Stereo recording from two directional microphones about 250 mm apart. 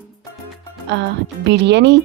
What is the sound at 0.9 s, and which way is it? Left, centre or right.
Speech, right.